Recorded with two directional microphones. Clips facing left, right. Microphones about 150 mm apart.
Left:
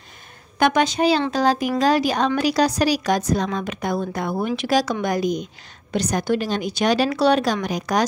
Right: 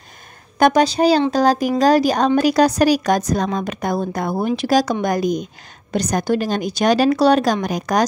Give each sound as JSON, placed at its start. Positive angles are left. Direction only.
{"t": 0.6, "sound": "a woman's voice", "side_deg": -40}